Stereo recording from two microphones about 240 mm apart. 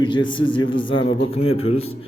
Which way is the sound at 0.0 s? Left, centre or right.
Centre.